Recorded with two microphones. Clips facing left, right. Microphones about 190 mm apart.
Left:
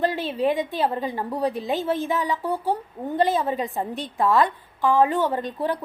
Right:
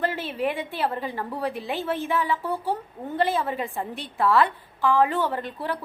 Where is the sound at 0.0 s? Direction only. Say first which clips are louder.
Left 4 dB; 15° left (ahead or behind).